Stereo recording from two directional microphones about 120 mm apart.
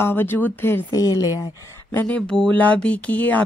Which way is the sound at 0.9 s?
30° left (ahead or behind).